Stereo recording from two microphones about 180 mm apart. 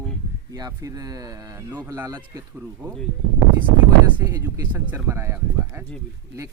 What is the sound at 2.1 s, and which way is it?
Speech, 25° right (ahead or behind).